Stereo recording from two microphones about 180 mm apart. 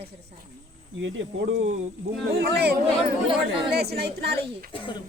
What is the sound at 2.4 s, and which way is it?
A woman's voice, 65° right (ahead or behind).